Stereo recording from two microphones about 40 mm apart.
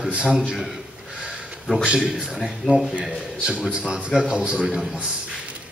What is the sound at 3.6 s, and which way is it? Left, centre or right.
Speech, right.